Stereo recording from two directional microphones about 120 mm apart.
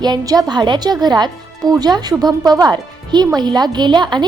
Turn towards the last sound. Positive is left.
turn(degrees=-40)  # may be behind; listen again after turning